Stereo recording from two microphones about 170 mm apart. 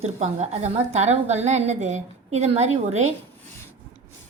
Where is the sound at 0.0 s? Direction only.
40° right (ahead or behind).